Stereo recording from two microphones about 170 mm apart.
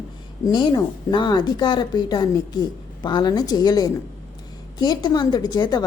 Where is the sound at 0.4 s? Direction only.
25° left (ahead or behind).